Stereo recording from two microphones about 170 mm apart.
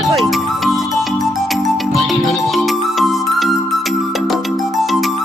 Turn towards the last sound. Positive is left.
turn(degrees=0)  # may be behind; listen again after turning